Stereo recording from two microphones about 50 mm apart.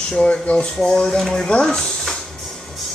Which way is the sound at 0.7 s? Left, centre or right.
Centre.